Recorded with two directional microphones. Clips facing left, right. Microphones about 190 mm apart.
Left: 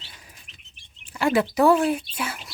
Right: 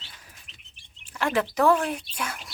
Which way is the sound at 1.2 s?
10° left (ahead or behind).